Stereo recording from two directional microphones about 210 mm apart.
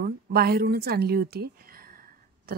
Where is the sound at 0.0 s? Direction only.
45° right (ahead or behind).